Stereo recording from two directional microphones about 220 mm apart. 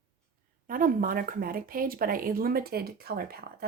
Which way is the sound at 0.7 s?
40° right (ahead or behind).